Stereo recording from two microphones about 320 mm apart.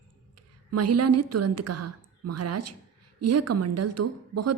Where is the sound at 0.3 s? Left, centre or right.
Right.